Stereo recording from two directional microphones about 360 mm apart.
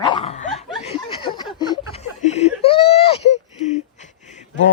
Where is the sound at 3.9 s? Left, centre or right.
Centre.